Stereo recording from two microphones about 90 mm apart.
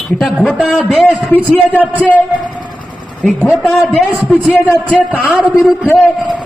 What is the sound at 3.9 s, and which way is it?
Speech, centre (ahead or behind).